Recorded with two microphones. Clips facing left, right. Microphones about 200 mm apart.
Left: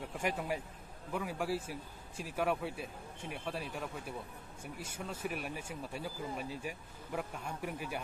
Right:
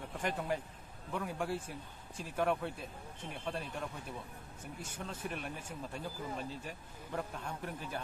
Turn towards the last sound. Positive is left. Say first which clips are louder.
# left 2 dB
turn(degrees=10)  # may be behind; listen again after turning